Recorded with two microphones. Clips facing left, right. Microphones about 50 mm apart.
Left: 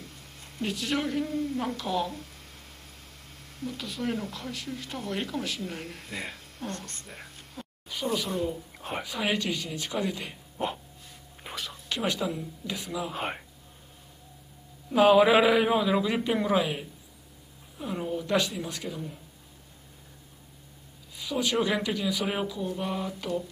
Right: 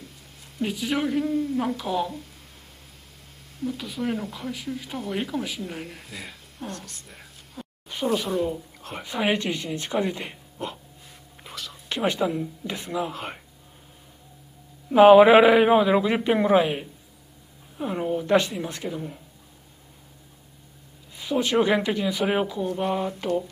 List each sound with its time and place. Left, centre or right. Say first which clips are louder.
0.6 s speech: right 4 dB; centre
3.5 s speech: right 5 dB; centre
6.0 s speech: left 2 dB; centre
6.6 s speech: right 1 dB; centre
7.0 s a sound: left 2 dB; centre
7.9 s speech: right 5 dB; right
11.4 s whispering: left 1 dB; centre
11.9 s speech: right 5 dB; centre
13.1 s speech: left 2 dB; centre
15.0 s a woman's voice: right 7 dB; right
21.2 s speech: right 5 dB; right